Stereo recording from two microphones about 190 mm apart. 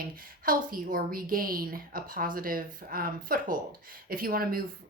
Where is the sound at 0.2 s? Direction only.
50° right (ahead or behind).